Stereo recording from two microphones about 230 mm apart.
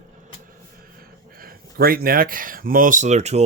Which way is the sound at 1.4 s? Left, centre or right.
Right.